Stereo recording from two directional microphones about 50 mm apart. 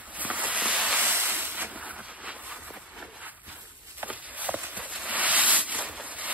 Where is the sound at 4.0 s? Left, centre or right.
Right.